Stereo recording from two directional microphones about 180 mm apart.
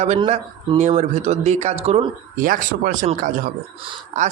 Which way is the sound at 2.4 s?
50° right (ahead or behind).